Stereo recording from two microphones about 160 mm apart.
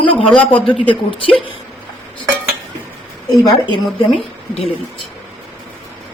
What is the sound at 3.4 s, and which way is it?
A woman's voice, 30° left (ahead or behind).